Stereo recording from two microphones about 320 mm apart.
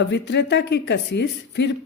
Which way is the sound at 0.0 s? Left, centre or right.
Left.